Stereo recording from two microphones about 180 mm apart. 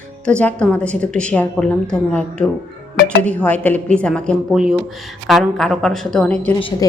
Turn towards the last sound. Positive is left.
turn(degrees=30)  # may be behind; listen again after turning